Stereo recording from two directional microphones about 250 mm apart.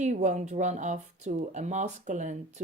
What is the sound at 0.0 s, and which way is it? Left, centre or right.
Speech, right.